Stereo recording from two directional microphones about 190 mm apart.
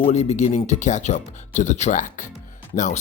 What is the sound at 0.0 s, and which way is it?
Speech, 35° left (ahead or behind).